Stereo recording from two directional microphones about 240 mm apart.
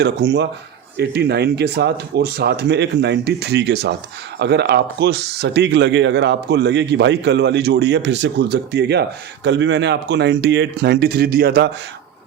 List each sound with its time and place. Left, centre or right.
0.0 s speech: right